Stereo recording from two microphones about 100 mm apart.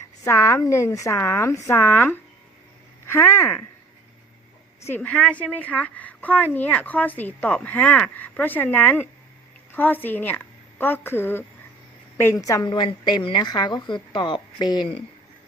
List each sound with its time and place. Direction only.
0.3 s a woman's voice: 30° left (ahead or behind)
4.9 s a woman's voice: 10° left (ahead or behind); by 12.6 s 30° left (ahead or behind)
12.6 s speech: 50° left (ahead or behind)